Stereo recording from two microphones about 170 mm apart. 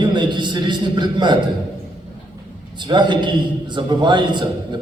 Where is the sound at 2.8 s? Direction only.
25° right (ahead or behind).